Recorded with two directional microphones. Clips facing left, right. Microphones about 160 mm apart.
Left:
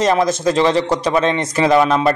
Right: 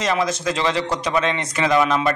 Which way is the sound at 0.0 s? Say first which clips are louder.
Left 6 dB; 45° left (ahead or behind).